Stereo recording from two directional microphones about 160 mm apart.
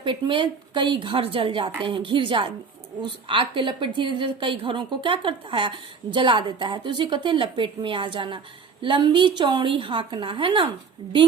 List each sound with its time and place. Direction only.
0.0 s a woman's voice: 30° right (ahead or behind)